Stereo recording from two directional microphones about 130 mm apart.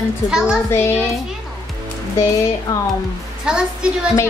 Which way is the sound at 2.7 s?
25° left (ahead or behind).